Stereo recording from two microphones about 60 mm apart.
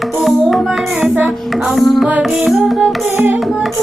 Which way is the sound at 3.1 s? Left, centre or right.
Right.